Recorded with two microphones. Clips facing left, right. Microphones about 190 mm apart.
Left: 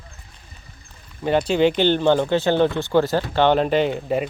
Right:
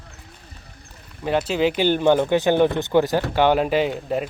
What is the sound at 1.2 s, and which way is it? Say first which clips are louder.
Speech: left 3 dB; centre (ahead or behind).